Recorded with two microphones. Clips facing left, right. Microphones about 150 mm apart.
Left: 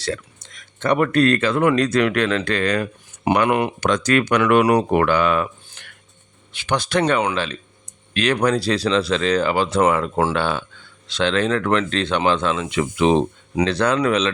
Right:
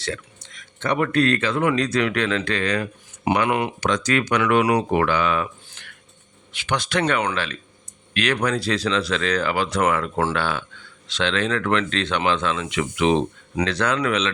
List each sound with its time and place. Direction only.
0.8 s speech: 45° left (ahead or behind)
6.7 s speech: 35° left (ahead or behind)
11.2 s speech: 40° left (ahead or behind)